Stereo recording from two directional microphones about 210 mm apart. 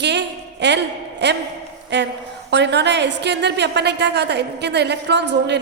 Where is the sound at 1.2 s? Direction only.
55° right (ahead or behind).